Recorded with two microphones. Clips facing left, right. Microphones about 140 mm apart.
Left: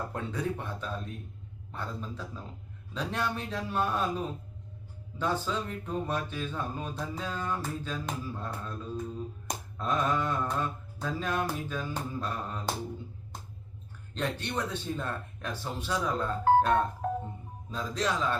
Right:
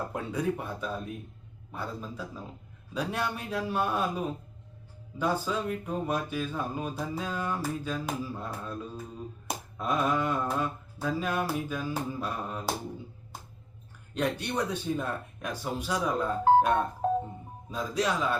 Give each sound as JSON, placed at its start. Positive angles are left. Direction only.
{"t": 0.1, "sound": "speech", "side_deg": -10}
{"t": 9.5, "sound": "finger snapping", "side_deg": -10}
{"t": 11.0, "sound": "speech", "side_deg": -10}
{"t": 14.1, "sound": "speech", "side_deg": -10}
{"t": 17.0, "sound": "music", "side_deg": -25}
{"t": 17.7, "sound": "speech", "side_deg": -10}